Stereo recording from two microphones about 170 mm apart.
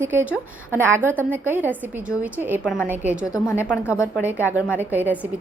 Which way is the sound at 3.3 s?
15° left (ahead or behind).